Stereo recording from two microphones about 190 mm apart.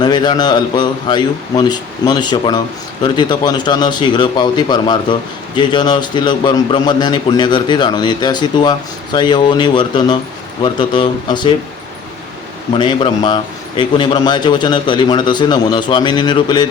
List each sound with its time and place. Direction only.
0.0 s a man's voice: 20° left (ahead or behind)
12.7 s a man's voice: 25° left (ahead or behind)